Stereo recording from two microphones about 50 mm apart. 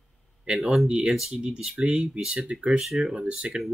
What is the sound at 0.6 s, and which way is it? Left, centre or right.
Speech, centre.